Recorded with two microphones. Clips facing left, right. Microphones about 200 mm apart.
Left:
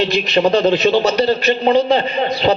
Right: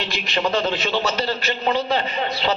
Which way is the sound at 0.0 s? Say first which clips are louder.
Left 9 dB; 20° left (ahead or behind).